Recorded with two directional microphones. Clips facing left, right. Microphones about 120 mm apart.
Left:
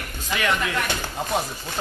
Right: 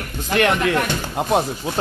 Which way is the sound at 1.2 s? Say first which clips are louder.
Right 9 dB; 70° right (ahead or behind).